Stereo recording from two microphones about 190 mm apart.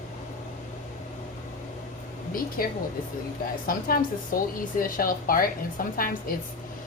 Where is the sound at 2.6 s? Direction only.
50° left (ahead or behind).